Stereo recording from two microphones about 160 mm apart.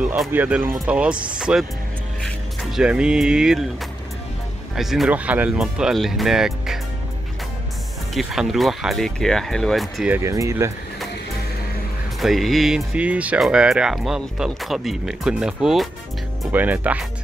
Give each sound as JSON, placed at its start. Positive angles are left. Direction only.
{"t": 0.0, "sound": "speech", "side_deg": -10}
{"t": 4.7, "sound": "speech", "side_deg": 0}
{"t": 8.1, "sound": "speech", "side_deg": 0}
{"t": 10.1, "sound": "speech", "side_deg": -20}
{"t": 12.2, "sound": "speech", "side_deg": 0}